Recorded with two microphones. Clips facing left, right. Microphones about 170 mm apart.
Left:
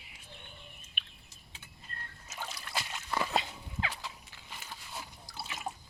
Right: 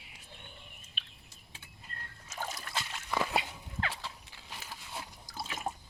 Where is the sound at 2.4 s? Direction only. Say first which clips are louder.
Right 3 dB; 45° right (ahead or behind).